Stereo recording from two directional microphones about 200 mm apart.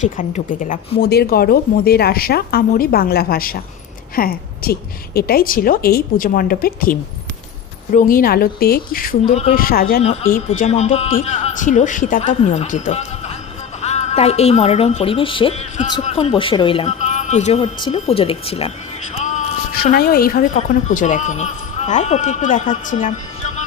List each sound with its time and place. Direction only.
0.0 s speech: 40° left (ahead or behind)
7.9 s speech: 45° left (ahead or behind)
9.3 s a woman's voice: 30° left (ahead or behind)
9.6 s speech: 45° left (ahead or behind)
10.0 s a woman's voice: 30° left (ahead or behind)
10.2 s a woman's voice: 40° left (ahead or behind)
19.1 s music: 35° left (ahead or behind)
19.7 s a woman's voice: 50° left (ahead or behind)